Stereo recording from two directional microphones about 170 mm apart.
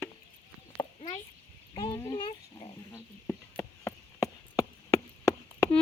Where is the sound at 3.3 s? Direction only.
15° left (ahead or behind).